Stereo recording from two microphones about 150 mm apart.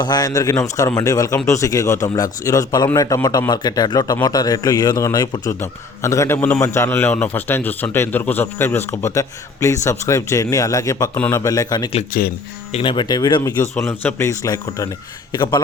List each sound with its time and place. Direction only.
0.0 s a man's voice: 25° left (ahead or behind)
12.1 s speech: 70° left (ahead or behind)
12.7 s a man's voice: 35° left (ahead or behind)